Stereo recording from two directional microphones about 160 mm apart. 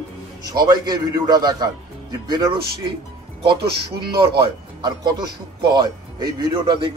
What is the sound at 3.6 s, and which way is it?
Speech, 80° right.